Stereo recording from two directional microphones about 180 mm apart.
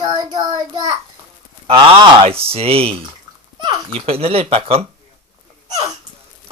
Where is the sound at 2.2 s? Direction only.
30° right (ahead or behind).